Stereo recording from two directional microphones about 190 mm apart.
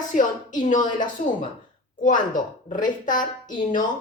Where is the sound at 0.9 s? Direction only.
40° left (ahead or behind).